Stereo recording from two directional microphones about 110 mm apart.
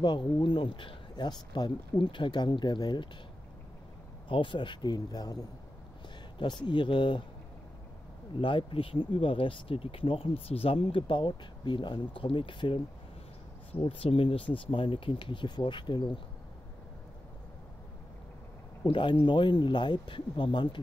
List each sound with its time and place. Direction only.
0.0 s speech: 45° left (ahead or behind)
4.3 s speech: 45° left (ahead or behind)
8.4 s speech: 50° left (ahead or behind)
13.8 s speech: 55° left (ahead or behind)
18.9 s speech: 50° left (ahead or behind)